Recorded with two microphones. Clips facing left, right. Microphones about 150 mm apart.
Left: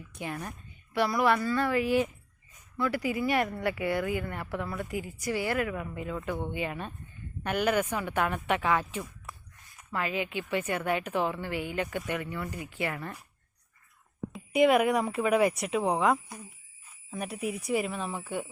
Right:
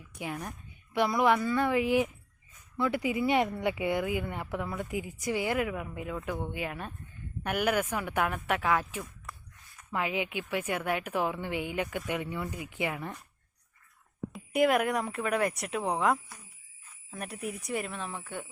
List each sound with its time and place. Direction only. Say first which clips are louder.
0.1 s a woman's voice: even; 10° right (ahead or behind)
12.2 s a woman's voice: even; 20° right (ahead or behind)
14.3 s speech: left 3 dB; centre (ahead or behind)